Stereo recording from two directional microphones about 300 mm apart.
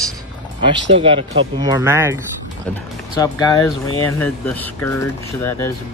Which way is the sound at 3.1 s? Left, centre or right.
Centre.